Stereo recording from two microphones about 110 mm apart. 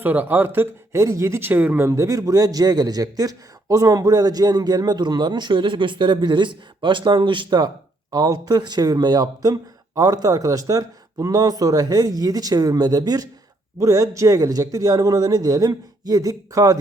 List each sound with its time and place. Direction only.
0.0 s speech: 15° right (ahead or behind)
1.9 s a man's voice: 30° right (ahead or behind)